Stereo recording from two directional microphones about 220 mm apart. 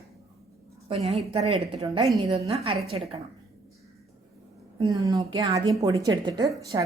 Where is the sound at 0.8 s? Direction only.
30° right (ahead or behind).